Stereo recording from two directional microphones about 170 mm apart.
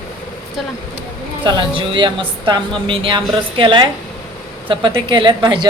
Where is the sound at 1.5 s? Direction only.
30° right (ahead or behind).